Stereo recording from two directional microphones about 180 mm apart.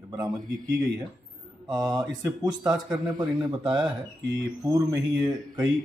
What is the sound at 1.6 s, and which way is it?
Speech, 20° right (ahead or behind).